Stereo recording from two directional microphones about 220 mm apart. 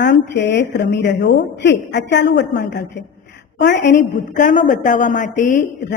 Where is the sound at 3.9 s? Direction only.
35° left (ahead or behind).